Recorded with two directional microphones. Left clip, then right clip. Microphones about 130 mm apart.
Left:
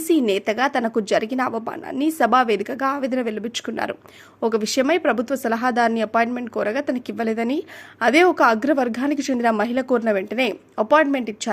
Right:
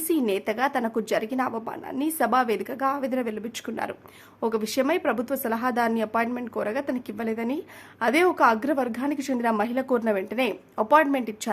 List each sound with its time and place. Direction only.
0.1 s a woman's voice: 30° left (ahead or behind)